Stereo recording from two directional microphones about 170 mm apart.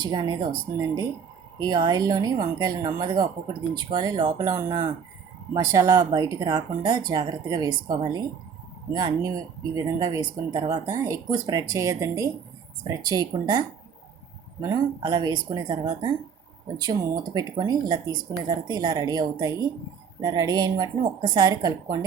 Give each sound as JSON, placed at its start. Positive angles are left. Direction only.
{"t": 0.0, "sound": "speech", "side_deg": -25}
{"t": 1.5, "sound": "speech", "side_deg": -25}